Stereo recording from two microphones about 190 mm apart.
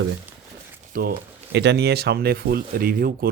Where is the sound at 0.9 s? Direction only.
50° right (ahead or behind).